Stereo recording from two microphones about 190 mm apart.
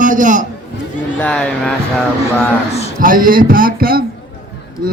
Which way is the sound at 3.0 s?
45° right (ahead or behind).